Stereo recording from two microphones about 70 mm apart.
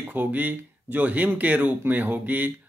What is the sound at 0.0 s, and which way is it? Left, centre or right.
Speech, right.